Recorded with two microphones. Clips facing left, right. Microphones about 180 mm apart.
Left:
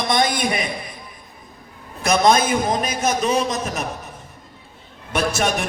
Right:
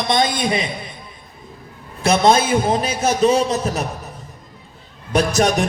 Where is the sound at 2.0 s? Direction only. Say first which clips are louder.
Right 2 dB; 30° right (ahead or behind).